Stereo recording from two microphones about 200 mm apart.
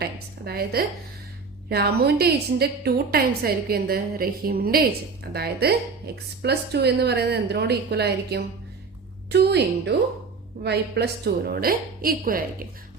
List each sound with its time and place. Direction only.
0.0 s a woman's voice: 50° right (ahead or behind)